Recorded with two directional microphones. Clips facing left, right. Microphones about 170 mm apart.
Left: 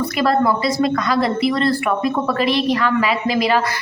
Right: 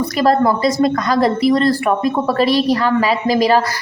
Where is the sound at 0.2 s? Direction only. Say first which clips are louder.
Right 3 dB; 40° right (ahead or behind).